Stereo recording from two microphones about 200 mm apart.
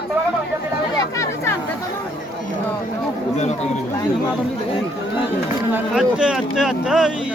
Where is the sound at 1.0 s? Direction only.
15° left (ahead or behind).